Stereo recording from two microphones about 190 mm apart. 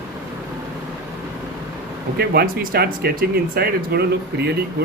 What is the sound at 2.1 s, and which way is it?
Speech, 55° right (ahead or behind).